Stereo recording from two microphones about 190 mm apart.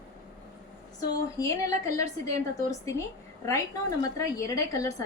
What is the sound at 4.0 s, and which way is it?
A woman's voice, 20° left (ahead or behind).